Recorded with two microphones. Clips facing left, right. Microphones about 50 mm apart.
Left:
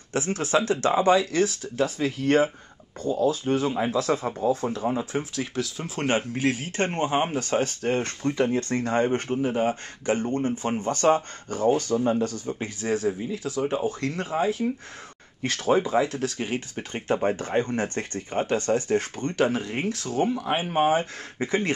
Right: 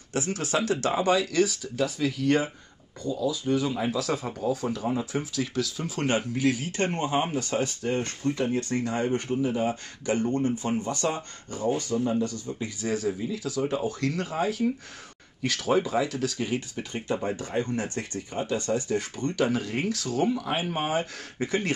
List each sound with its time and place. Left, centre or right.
0.1 s speech: left
7.3 s speech: left